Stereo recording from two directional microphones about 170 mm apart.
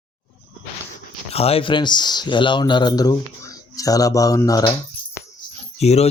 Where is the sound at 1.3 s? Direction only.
35° left (ahead or behind); by 4.8 s 20° left (ahead or behind).